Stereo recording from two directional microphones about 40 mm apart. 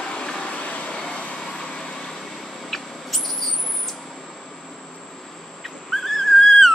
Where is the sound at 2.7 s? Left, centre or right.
Centre.